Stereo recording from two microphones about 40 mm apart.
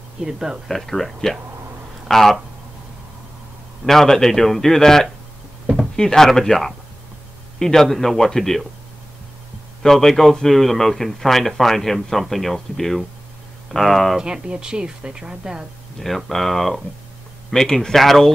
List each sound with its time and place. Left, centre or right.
0.2 s speech: centre
0.7 s a man's voice: centre
3.8 s a man's voice: centre
9.8 s a man's voice: centre
14.2 s speech: right
16.3 s a man's voice: centre